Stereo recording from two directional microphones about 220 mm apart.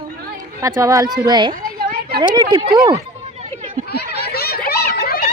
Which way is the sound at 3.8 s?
45° left (ahead or behind).